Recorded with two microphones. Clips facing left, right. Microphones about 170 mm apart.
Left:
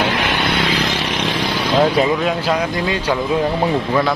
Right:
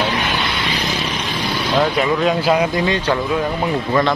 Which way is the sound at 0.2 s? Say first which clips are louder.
Left 3 dB; 90° left.